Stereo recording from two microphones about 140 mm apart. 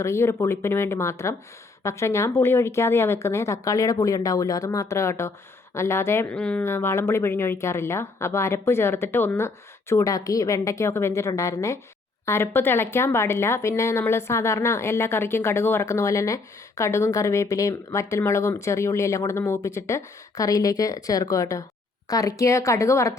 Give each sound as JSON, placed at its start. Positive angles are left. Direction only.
{"t": 0.0, "sound": "speech", "side_deg": 20}